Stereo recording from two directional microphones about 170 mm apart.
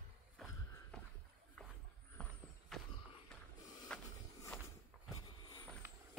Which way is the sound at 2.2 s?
5° left (ahead or behind).